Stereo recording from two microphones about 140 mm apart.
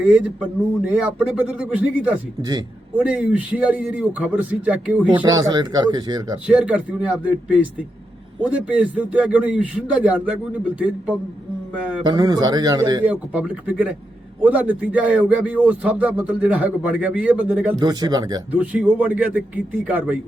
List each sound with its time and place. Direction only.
0.0 s speech: 5° right (ahead or behind)
2.4 s speech: 30° right (ahead or behind)
3.0 s speech: 10° right (ahead or behind)
5.3 s speech: 30° right (ahead or behind)
6.5 s speech: 10° right (ahead or behind)
12.0 s speech: 30° right (ahead or behind)
13.1 s speech: 10° right (ahead or behind)
17.7 s speech: 30° right (ahead or behind)
18.5 s speech: 10° right (ahead or behind)